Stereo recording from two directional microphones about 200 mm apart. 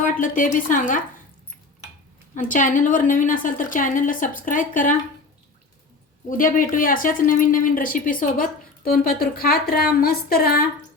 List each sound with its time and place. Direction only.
0.0 s a woman's voice: 40° left (ahead or behind)
2.5 s a woman's voice: 40° left (ahead or behind)
6.2 s speech: 45° left (ahead or behind)